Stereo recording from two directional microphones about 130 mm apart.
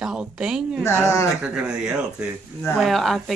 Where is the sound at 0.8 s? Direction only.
20° left (ahead or behind).